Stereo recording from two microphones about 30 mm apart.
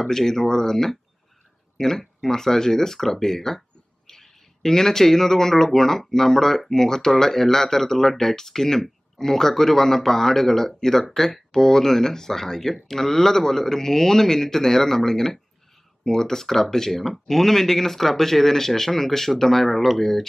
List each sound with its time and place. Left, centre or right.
0.0 s speech: centre